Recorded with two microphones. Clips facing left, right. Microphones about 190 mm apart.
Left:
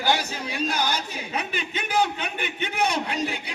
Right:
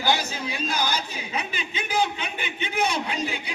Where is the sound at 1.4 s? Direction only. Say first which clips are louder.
Left 2 dB; 60° left (ahead or behind).